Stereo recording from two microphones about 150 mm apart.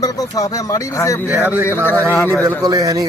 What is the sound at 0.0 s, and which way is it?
Speech, 25° left (ahead or behind).